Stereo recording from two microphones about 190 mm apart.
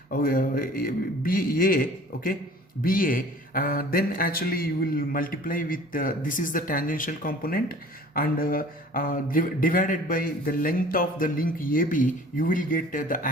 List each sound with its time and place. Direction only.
0.1 s speech: 50° left (ahead or behind)